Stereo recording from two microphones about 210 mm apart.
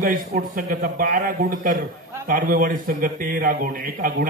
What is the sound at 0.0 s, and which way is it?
A man's voice, 40° right (ahead or behind).